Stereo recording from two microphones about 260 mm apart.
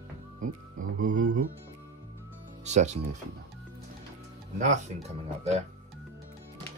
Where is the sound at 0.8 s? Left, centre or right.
Right.